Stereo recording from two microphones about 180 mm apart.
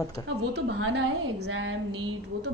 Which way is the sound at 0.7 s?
90° right.